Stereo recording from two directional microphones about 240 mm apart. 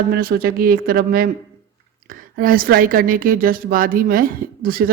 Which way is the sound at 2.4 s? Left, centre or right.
Right.